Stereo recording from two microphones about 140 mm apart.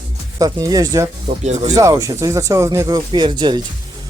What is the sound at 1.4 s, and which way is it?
Speech, 55° right (ahead or behind).